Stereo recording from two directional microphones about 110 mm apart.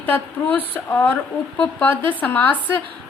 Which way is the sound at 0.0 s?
15° left (ahead or behind).